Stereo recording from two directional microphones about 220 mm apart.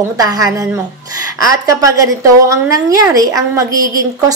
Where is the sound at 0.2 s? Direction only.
15° right (ahead or behind).